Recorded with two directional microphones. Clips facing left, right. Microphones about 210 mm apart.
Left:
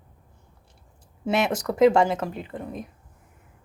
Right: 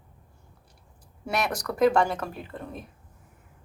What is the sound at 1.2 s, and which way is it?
Speech, 25° left (ahead or behind).